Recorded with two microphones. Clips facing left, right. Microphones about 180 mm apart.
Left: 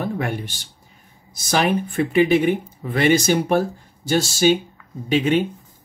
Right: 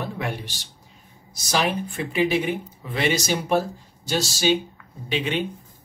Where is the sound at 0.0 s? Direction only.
50° left (ahead or behind).